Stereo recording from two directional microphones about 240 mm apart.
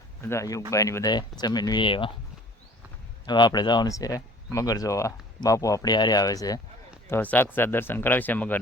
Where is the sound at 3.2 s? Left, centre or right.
Centre.